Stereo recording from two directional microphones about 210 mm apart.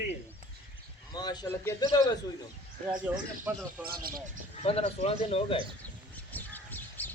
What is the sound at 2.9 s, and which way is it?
Speech, 5° right (ahead or behind).